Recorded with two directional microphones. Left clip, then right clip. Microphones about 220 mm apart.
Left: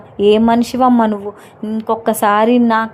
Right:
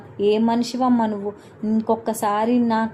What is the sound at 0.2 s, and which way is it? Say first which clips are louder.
Speech: left 8 dB; 30° left (ahead or behind).